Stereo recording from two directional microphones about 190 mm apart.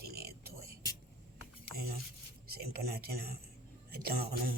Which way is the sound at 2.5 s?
55° right (ahead or behind).